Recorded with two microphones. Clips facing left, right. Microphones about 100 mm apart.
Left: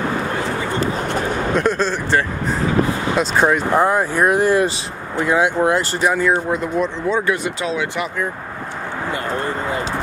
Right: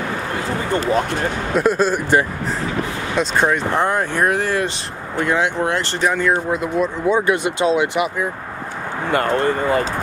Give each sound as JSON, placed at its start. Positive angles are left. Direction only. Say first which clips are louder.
{"t": 1.5, "sound": "speech", "louder": "right 3 dB", "side_deg": -5}
{"t": 3.2, "sound": "speech", "louder": "even", "side_deg": 5}
{"t": 4.6, "sound": "speech", "louder": "left 2 dB", "side_deg": 5}
{"t": 7.1, "sound": "speech", "louder": "right 2 dB", "side_deg": -15}
{"t": 9.1, "sound": "speech", "louder": "right 7 dB", "side_deg": -65}